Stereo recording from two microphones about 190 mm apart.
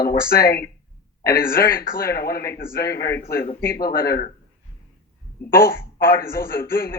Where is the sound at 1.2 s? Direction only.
50° left (ahead or behind).